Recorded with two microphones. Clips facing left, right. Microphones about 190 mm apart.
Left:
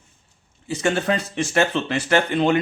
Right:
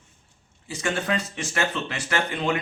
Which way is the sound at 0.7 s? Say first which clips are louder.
Left 5 dB; 30° left (ahead or behind).